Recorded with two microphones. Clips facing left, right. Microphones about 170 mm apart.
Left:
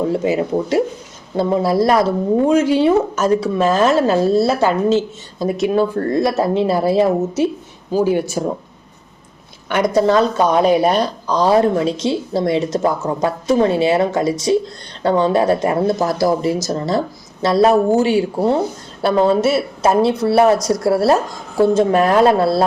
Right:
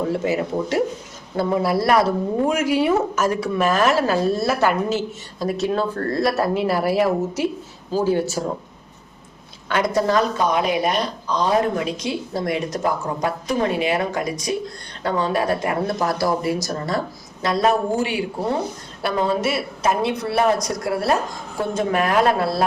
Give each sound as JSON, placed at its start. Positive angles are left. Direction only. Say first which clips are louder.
{"t": 0.1, "sound": "speech", "louder": "left 4 dB", "side_deg": 20}
{"t": 9.6, "sound": "a woman's voice", "louder": "left 5 dB", "side_deg": 20}